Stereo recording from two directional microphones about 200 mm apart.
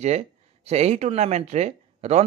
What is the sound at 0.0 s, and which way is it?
Speech, 35° right (ahead or behind).